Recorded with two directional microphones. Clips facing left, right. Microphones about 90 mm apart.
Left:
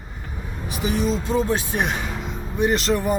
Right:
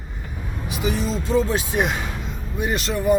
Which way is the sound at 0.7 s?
50° left (ahead or behind).